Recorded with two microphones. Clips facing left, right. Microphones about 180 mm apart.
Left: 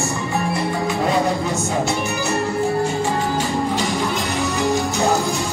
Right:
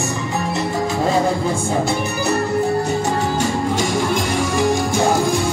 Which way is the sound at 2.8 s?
40° right (ahead or behind).